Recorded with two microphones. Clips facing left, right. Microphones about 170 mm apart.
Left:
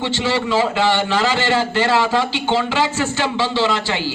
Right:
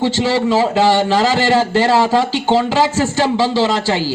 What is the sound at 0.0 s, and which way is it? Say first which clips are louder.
A man's voice: right 5 dB; 40° right (ahead or behind).